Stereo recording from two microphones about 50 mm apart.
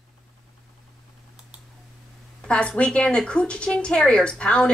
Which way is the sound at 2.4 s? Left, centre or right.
Left.